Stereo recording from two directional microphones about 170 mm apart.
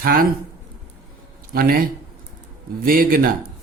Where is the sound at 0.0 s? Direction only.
60° right (ahead or behind).